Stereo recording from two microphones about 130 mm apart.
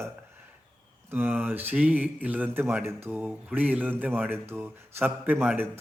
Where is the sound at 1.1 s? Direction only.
15° right (ahead or behind).